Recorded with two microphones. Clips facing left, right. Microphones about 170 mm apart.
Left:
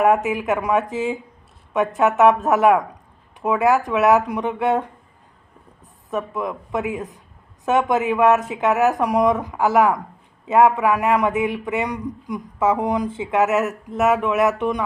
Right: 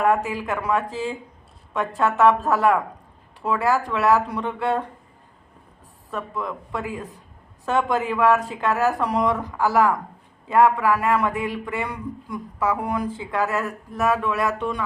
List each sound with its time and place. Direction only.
0.0 s a man's voice: 20° left (ahead or behind)
6.1 s a man's voice: 20° left (ahead or behind)